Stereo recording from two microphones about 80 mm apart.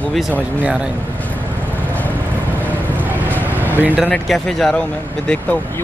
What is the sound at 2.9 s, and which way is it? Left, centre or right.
Vehicle, right.